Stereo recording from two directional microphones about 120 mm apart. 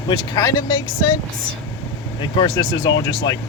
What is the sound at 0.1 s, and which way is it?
Speech, 35° left (ahead or behind).